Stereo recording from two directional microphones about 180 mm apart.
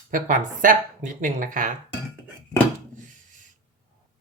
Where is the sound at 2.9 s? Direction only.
45° right (ahead or behind).